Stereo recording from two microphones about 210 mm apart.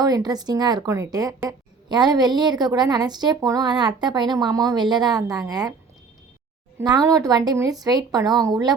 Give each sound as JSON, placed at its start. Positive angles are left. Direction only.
{"t": 0.0, "sound": "speech", "side_deg": -20}
{"t": 6.7, "sound": "speech", "side_deg": -15}